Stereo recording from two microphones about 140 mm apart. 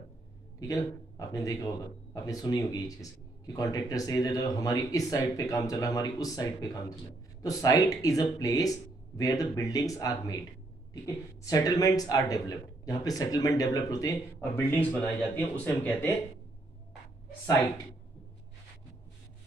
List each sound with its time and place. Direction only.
0.6 s speech: 25° left (ahead or behind)
14.8 s speech: 10° left (ahead or behind)